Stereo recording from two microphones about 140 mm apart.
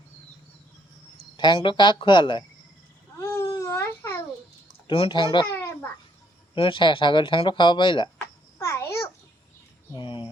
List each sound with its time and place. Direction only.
1.4 s speech: 35° left (ahead or behind)
3.2 s baby cry: 20° left (ahead or behind)
4.9 s speech: 35° left (ahead or behind)
6.5 s speech: 35° left (ahead or behind)
8.5 s babbling: 20° left (ahead or behind)
9.9 s a sound: 35° left (ahead or behind)